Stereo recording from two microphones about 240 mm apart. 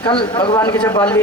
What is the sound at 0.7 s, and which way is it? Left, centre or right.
Speech, centre.